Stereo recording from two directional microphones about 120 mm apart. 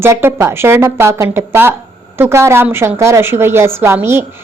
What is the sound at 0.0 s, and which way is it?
Speech, 20° right (ahead or behind).